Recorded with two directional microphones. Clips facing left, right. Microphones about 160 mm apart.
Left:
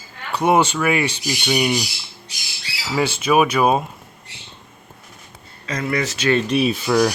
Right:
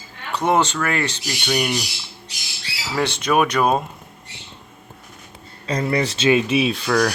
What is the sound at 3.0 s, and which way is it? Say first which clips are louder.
Speech: left 2 dB; 5° left (ahead or behind).